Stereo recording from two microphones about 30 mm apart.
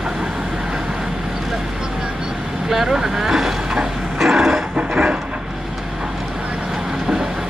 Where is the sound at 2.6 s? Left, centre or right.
Centre.